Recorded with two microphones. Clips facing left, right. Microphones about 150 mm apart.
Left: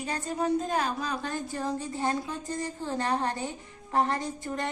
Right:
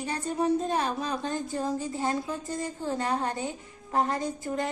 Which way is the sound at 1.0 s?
25° right (ahead or behind).